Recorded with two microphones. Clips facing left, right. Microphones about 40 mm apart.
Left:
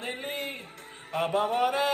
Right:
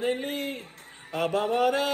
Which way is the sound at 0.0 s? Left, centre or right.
Centre.